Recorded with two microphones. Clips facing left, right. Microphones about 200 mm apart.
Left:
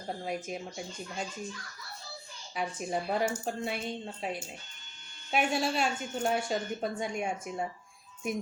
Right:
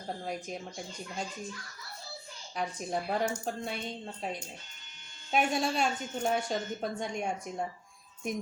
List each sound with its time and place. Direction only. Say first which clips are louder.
0.3 s a woman's voice: left 2 dB; 5° left (ahead or behind)
2.6 s a woman's voice: left 1 dB; 5° left (ahead or behind)